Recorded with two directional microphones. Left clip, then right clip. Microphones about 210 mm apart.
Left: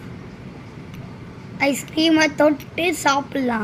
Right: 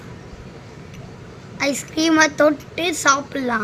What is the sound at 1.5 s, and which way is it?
A child's voice, 80° right.